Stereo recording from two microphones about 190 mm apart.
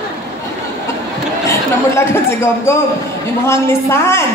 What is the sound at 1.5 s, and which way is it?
A man's voice, 15° left (ahead or behind).